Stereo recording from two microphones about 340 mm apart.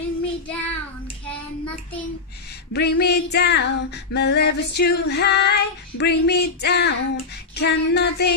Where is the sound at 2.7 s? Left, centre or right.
Left.